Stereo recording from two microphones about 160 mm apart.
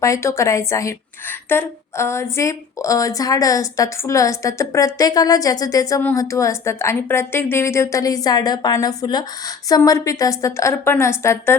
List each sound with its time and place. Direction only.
0.0 s a woman's voice: 20° left (ahead or behind)